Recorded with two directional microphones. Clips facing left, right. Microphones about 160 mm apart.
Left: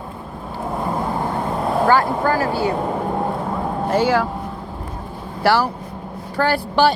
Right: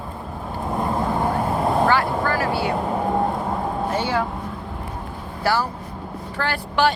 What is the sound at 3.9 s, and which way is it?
Speech, 90° left.